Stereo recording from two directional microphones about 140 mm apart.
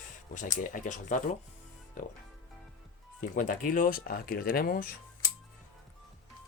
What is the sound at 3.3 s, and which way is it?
Speech, 70° left (ahead or behind).